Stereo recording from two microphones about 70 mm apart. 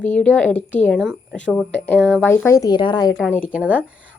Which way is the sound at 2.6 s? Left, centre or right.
Left.